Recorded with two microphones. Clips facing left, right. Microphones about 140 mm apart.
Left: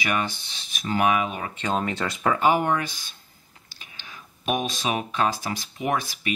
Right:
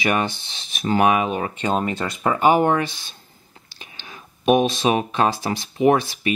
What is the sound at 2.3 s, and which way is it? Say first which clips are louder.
Speech: right 5 dB; 15° right (ahead or behind).